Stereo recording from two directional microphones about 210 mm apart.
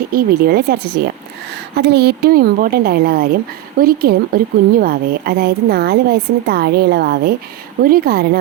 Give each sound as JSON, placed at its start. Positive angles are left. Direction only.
{"t": 0.1, "sound": "a woman's voice", "side_deg": -45}